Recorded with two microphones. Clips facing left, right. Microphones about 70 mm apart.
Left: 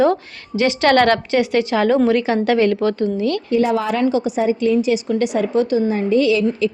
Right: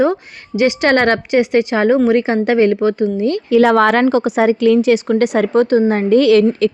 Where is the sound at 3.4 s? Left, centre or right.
Right.